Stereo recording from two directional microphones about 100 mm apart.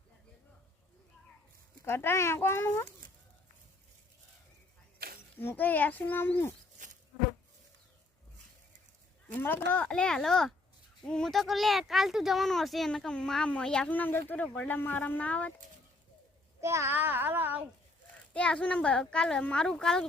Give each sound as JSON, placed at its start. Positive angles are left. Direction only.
{"t": 1.8, "sound": "a child's voice", "side_deg": 25}
{"t": 5.4, "sound": "a child's voice", "side_deg": 20}
{"t": 9.3, "sound": "speech", "side_deg": 20}
{"t": 16.6, "sound": "a child's voice", "side_deg": -30}
{"t": 18.3, "sound": "speech", "side_deg": 10}